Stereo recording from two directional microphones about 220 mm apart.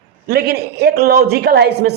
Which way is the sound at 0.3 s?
45° right (ahead or behind).